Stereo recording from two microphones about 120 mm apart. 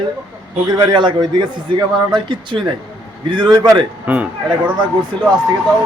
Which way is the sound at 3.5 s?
30° right (ahead or behind).